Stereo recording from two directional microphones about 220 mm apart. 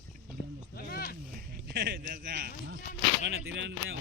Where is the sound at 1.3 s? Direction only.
45° right (ahead or behind).